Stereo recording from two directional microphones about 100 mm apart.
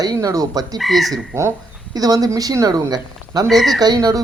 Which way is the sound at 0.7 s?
Centre (ahead or behind).